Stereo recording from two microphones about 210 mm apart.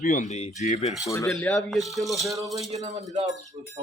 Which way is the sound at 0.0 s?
40° left (ahead or behind).